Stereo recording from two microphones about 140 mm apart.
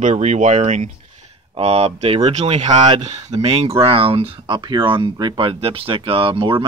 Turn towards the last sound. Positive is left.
turn(degrees=-35)  # may be behind; listen again after turning